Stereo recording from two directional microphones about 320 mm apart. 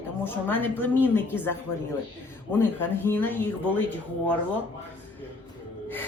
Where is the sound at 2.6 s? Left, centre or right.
Centre.